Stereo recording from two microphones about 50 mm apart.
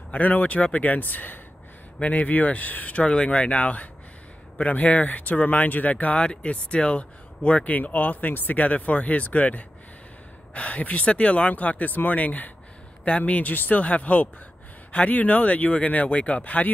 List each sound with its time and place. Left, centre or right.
0.1 s speech: left
2.0 s speech: left